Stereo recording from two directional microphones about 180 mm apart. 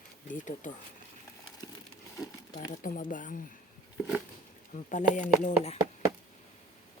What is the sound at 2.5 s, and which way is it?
Speech, 50° left (ahead or behind).